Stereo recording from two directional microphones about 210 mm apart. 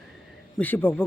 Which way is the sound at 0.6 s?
10° left (ahead or behind).